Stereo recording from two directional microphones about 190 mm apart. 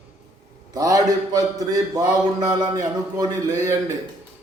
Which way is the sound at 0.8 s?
20° right (ahead or behind).